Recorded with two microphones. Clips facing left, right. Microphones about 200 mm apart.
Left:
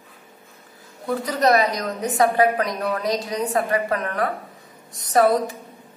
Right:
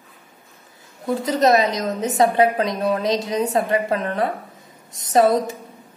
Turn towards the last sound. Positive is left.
turn(degrees=-25)  # may be behind; listen again after turning